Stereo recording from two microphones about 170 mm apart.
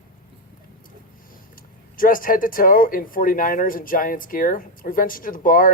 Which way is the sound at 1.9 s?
55° left (ahead or behind).